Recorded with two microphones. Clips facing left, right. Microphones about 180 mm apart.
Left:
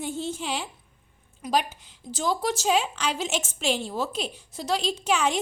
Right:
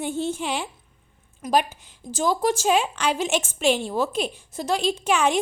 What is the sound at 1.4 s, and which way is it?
A woman's voice, 50° right (ahead or behind).